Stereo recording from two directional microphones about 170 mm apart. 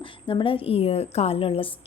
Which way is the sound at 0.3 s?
30° left (ahead or behind).